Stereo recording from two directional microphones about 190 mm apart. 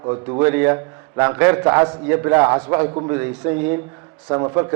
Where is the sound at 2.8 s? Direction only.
25° right (ahead or behind).